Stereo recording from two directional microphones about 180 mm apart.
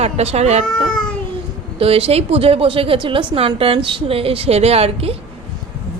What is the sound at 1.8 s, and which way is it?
A woman's voice, 30° right (ahead or behind).